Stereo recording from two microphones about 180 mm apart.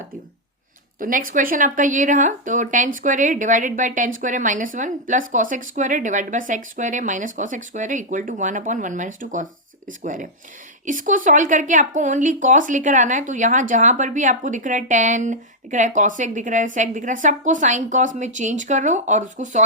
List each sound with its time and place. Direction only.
0.9 s a woman's voice: 50° right (ahead or behind)